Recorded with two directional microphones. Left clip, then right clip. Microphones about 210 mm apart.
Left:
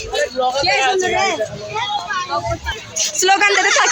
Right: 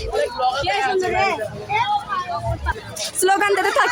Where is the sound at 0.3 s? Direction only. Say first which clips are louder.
Left 6 dB; 40° left (ahead or behind).